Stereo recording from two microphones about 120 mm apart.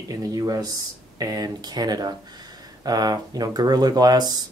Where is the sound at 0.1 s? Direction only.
30° right (ahead or behind).